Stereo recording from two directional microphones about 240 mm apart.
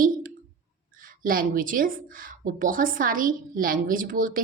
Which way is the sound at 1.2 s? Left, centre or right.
Right.